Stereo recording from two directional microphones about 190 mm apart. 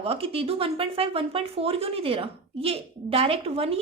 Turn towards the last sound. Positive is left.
turn(degrees=-30)  # may be behind; listen again after turning